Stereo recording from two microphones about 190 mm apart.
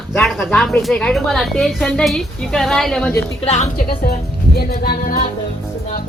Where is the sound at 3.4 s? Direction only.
35° left (ahead or behind).